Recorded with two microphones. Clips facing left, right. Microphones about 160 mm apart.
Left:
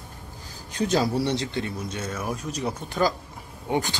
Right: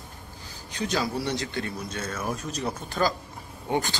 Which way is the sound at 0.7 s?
35° left (ahead or behind).